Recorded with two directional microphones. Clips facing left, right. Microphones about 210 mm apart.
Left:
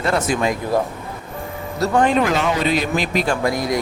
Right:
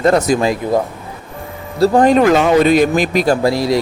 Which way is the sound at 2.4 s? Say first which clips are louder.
Right 9 dB; 50° right (ahead or behind).